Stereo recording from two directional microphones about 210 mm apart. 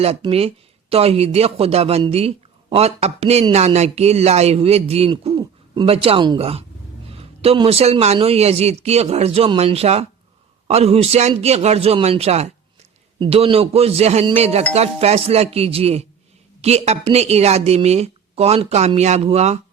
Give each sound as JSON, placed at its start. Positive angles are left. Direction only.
{"t": 0.0, "sound": "a woman's voice", "side_deg": -30}